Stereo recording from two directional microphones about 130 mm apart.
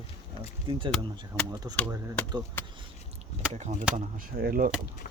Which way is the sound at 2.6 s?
15° left (ahead or behind).